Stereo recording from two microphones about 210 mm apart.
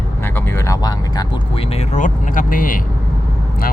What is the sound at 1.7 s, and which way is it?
Speech, 35° left (ahead or behind).